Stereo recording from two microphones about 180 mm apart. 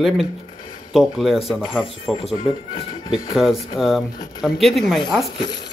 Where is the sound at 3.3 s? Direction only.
Centre (ahead or behind).